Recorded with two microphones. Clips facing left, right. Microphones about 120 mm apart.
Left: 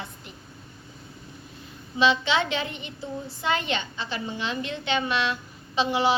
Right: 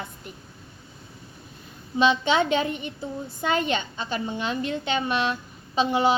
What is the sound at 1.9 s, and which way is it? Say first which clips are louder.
Speech: right 2 dB; 45° right (ahead or behind).